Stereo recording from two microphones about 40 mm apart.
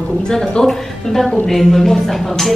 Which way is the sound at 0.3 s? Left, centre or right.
Centre.